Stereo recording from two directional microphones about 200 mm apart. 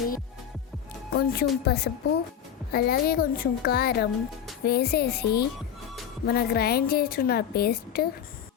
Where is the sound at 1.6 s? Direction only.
55° left (ahead or behind).